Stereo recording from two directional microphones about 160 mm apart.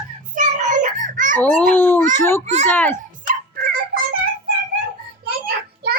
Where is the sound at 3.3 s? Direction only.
60° right (ahead or behind).